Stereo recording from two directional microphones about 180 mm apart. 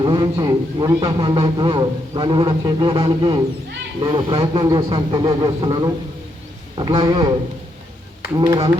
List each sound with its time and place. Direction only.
0.0 s a man's voice: 25° right (ahead or behind)
8.4 s a man's voice: 25° right (ahead or behind)